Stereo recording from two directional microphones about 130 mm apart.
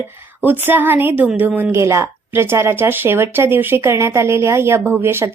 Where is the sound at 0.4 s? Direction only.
15° right (ahead or behind).